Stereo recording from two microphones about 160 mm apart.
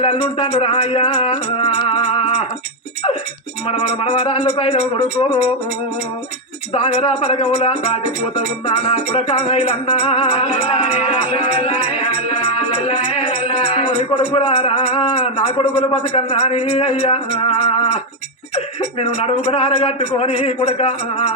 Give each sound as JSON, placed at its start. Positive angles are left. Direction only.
{"t": 0.0, "sound": "speech", "side_deg": 35}
{"t": 1.8, "sound": "music", "side_deg": 35}
{"t": 3.7, "sound": "speech", "side_deg": 40}
{"t": 6.7, "sound": "speech", "side_deg": 40}